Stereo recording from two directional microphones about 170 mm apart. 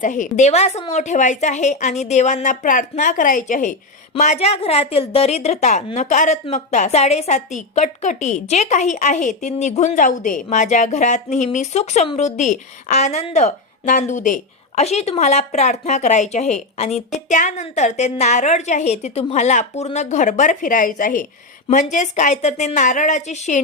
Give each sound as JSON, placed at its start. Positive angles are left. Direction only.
{"t": 0.0, "sound": "a woman's voice", "side_deg": 45}